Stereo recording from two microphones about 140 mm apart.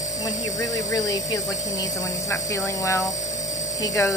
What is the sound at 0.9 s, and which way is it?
Speech, 25° left (ahead or behind).